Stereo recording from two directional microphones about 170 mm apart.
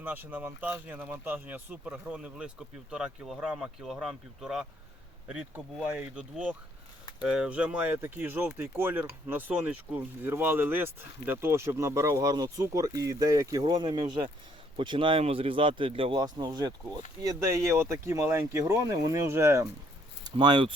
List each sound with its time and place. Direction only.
0.0 s speech: 10° right (ahead or behind)
20.2 s speech: 30° right (ahead or behind)